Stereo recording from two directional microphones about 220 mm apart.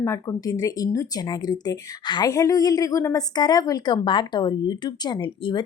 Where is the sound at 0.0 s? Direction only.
15° left (ahead or behind).